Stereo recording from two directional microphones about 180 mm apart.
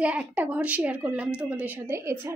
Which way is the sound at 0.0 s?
5° right (ahead or behind).